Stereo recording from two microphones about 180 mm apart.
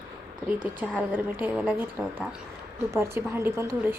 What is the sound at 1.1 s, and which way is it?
A woman's voice, 10° right (ahead or behind).